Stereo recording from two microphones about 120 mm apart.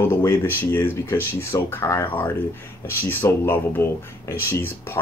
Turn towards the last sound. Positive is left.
turn(degrees=20)  # may be behind; listen again after turning